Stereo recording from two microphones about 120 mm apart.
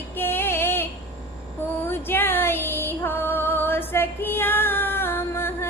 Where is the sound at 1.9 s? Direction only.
20° left (ahead or behind).